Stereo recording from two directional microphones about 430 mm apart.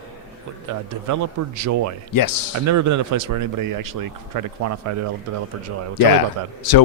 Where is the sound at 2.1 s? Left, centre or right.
Left.